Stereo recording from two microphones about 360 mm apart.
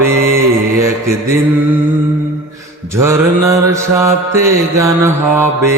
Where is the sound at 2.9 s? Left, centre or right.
Centre.